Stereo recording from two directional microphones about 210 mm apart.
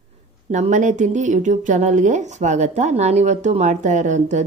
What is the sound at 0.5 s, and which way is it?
Speech, 35° right (ahead or behind).